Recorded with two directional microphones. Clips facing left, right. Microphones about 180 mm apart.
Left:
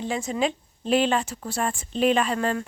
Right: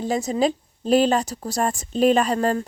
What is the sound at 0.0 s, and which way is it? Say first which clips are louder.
A woman's voice: right 4 dB; 40° right (ahead or behind).